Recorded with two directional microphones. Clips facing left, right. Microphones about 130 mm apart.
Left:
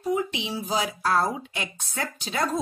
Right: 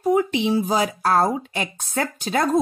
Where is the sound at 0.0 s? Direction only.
55° right (ahead or behind).